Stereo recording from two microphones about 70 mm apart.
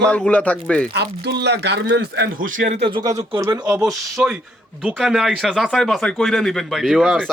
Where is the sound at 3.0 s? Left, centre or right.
Right.